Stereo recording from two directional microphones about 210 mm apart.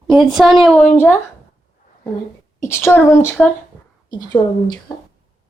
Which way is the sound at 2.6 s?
10° left (ahead or behind).